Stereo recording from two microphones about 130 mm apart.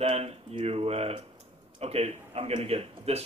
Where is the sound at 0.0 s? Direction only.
50° right (ahead or behind).